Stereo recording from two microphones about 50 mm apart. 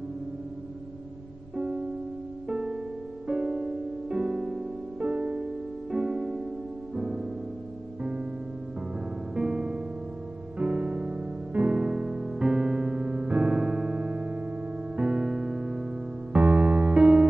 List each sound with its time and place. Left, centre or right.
1.6 s music: right
5.9 s music: centre
9.3 s music: centre
11.8 s music: centre
16.3 s electric piano: right